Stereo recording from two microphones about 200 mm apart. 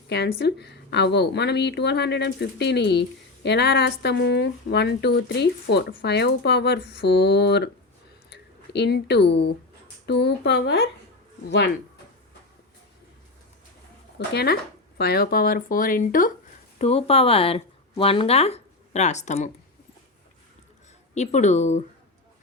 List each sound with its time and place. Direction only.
0.1 s a woman's voice: 55° left (ahead or behind)
14.2 s speech: 55° left (ahead or behind)
16.7 s speech: 30° left (ahead or behind)
21.2 s speech: 35° left (ahead or behind)